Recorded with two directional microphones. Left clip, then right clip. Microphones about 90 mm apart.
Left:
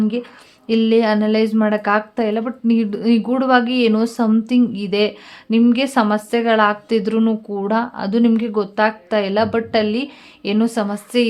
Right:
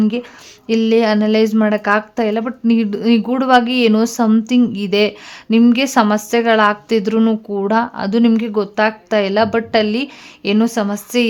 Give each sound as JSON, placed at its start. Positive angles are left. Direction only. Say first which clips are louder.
{"t": 0.0, "sound": "a woman's voice", "louder": "right 2 dB", "side_deg": -30}
{"t": 0.7, "sound": "a woman's voice", "louder": "right 2 dB", "side_deg": -20}